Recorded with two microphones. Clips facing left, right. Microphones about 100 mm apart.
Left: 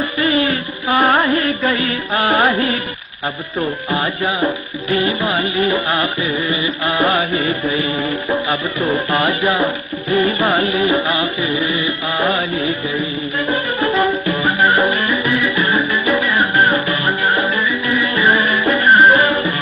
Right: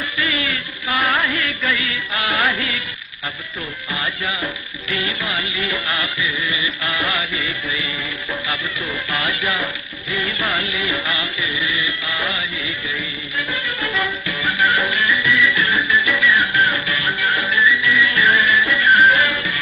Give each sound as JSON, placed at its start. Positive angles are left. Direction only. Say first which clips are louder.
{"t": 0.2, "sound": "music", "louder": "left 8 dB", "side_deg": 35}
{"t": 3.9, "sound": "music", "louder": "left 4 dB", "side_deg": 35}